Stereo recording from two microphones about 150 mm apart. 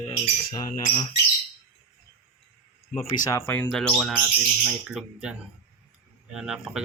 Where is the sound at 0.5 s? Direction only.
30° left (ahead or behind).